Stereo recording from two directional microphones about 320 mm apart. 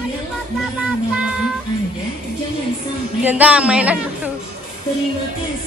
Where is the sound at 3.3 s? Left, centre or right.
Centre.